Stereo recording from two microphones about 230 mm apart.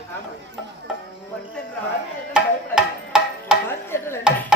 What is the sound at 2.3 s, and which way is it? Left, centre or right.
Music, centre.